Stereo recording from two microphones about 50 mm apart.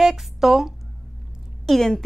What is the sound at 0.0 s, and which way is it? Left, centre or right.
Speech, centre.